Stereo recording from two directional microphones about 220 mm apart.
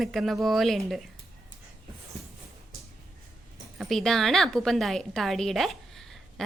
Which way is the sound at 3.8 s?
Centre (ahead or behind).